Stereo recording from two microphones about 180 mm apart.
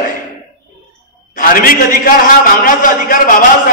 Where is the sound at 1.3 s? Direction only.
50° left (ahead or behind).